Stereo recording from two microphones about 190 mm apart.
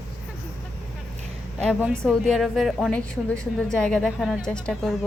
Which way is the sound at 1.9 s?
5° left (ahead or behind).